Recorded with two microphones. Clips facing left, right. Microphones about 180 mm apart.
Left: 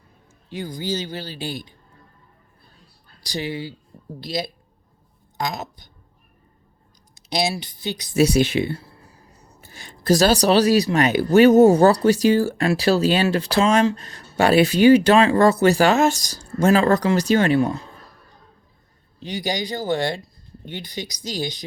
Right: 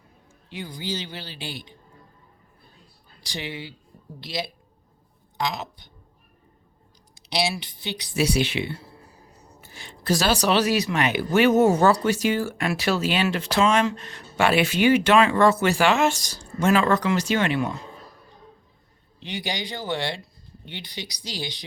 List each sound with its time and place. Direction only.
0.3 s speech: 40° left (ahead or behind)
3.2 s speech: 40° left (ahead or behind)
7.2 s speech: 45° left (ahead or behind)
19.2 s speech: 40° left (ahead or behind)